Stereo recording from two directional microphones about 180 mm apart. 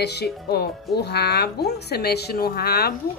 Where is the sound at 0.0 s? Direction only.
65° left (ahead or behind).